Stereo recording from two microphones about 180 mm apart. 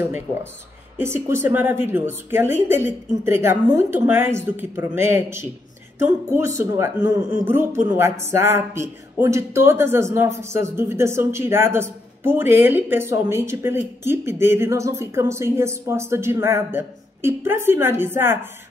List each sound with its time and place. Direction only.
0.0 s speech: 15° right (ahead or behind)